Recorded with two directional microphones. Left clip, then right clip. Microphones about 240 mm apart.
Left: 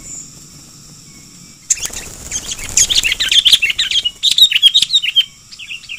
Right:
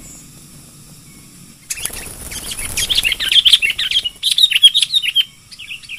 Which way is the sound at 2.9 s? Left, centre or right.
Centre.